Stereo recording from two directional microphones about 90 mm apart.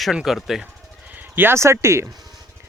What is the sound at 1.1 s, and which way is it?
Speech, 20° right (ahead or behind).